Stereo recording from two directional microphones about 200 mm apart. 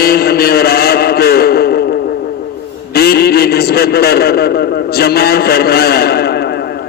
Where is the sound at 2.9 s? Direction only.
50° left (ahead or behind).